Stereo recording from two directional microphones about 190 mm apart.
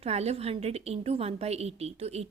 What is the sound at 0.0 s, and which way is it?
A woman's voice, 35° right (ahead or behind).